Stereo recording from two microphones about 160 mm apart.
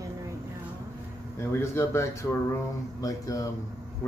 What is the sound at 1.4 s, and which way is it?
Speech, 15° left (ahead or behind).